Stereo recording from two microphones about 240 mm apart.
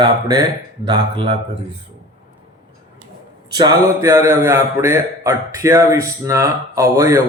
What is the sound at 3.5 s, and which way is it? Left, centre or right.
A man's voice, centre.